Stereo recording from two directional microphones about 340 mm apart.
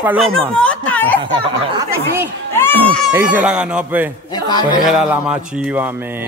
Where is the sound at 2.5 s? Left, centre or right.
Centre.